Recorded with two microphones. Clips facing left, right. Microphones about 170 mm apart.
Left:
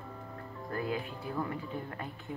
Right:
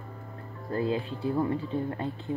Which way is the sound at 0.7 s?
25° right (ahead or behind).